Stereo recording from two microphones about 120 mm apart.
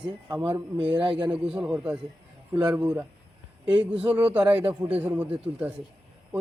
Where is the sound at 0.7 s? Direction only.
45° right (ahead or behind).